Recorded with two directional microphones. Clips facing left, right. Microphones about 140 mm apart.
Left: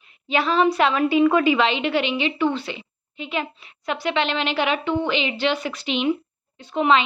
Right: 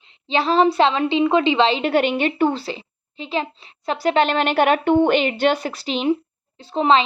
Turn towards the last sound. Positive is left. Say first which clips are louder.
# right 2 dB
turn(degrees=-30)  # may be behind; listen again after turning